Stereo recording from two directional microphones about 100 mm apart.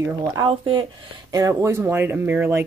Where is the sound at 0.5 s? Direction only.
65° right (ahead or behind).